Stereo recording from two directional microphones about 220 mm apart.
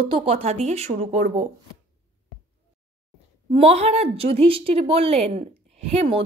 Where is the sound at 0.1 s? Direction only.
25° right (ahead or behind).